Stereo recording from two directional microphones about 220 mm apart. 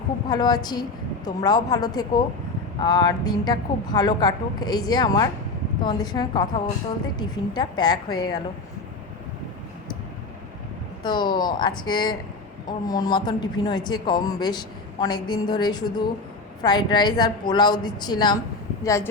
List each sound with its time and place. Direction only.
0.3 s a woman's voice: 20° left (ahead or behind)
11.0 s a woman's voice: 20° left (ahead or behind)